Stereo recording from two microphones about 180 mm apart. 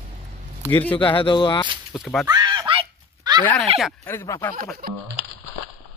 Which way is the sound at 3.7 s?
35° right (ahead or behind).